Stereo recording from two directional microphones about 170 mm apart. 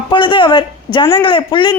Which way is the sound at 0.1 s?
25° left (ahead or behind).